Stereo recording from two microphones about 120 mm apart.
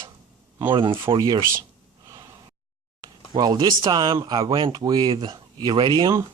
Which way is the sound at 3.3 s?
35° right (ahead or behind).